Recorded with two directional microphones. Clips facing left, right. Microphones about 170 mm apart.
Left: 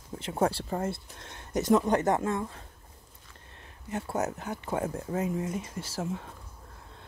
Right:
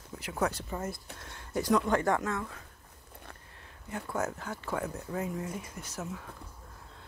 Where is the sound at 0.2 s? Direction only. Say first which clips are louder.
Left 4 dB; 30° left (ahead or behind).